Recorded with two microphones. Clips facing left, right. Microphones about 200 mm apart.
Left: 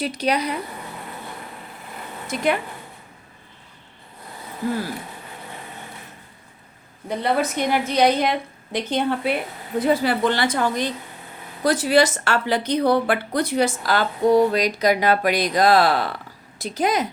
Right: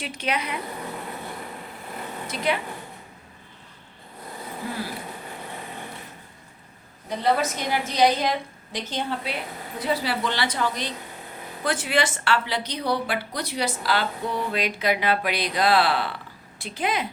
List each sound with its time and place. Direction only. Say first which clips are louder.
0.0 s speech: left 6 dB; 35° left (ahead or behind)
2.2 s speech: left 4 dB; 50° left (ahead or behind)
7.2 s a woman's voice: left 2 dB; 60° left (ahead or behind)
11.6 s a woman's voice: left 7 dB; 40° left (ahead or behind)